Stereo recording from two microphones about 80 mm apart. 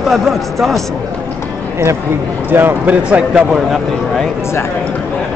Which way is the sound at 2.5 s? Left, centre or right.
Right.